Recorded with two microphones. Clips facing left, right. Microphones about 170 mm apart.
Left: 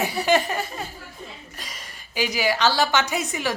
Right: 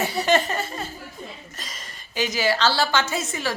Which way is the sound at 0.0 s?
10° left (ahead or behind).